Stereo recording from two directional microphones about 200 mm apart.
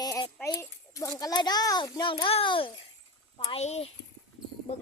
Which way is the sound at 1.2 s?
20° left (ahead or behind).